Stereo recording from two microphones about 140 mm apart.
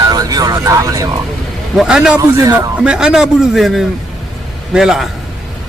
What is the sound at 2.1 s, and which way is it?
Speech, 25° right (ahead or behind).